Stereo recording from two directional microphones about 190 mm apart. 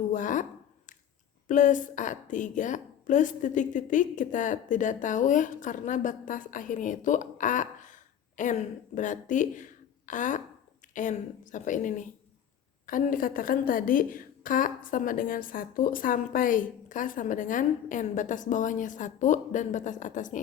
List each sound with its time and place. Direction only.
0.1 s a woman's voice: 40° left (ahead or behind)
1.5 s a woman's voice: 40° left (ahead or behind)